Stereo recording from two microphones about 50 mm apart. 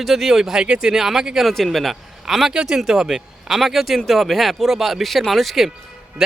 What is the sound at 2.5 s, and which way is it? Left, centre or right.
Speech, centre.